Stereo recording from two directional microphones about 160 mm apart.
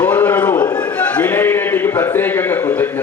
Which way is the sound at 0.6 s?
25° left (ahead or behind).